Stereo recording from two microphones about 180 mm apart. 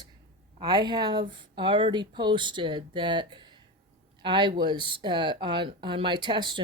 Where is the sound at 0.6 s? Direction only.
20° right (ahead or behind).